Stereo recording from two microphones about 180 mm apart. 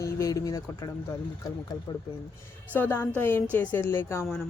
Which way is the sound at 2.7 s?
10° left (ahead or behind).